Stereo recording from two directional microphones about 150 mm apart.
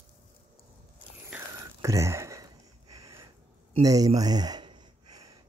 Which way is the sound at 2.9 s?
20° right (ahead or behind).